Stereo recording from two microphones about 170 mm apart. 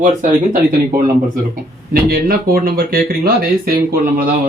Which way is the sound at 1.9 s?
60° right (ahead or behind).